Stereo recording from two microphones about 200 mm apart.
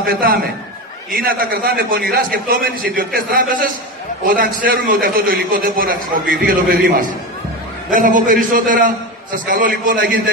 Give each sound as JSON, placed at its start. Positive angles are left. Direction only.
{"t": 0.0, "sound": "a man's voice", "side_deg": -50}
{"t": 7.9, "sound": "a man's voice", "side_deg": -45}